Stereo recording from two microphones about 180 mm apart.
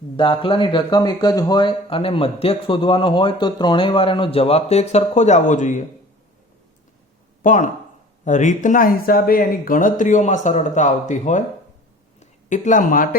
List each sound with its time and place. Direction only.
0.2 s speech: 30° left (ahead or behind); by 5.8 s 45° left (ahead or behind)
7.4 s speech: 45° left (ahead or behind)